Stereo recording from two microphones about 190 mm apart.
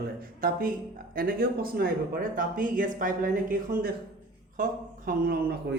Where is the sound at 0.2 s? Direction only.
50° right (ahead or behind).